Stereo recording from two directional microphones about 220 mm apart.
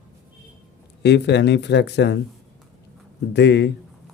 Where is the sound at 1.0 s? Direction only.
50° left (ahead or behind).